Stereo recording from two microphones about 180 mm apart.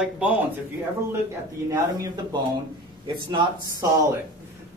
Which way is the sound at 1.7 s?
20° right (ahead or behind).